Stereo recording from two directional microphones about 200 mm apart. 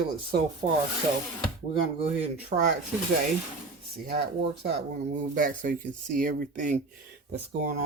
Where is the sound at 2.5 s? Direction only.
35° right (ahead or behind).